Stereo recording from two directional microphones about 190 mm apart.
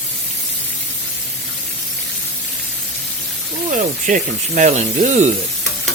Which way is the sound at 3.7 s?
40° right (ahead or behind).